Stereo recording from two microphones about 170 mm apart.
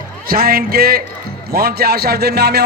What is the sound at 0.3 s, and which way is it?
A man's voice, 60° right (ahead or behind).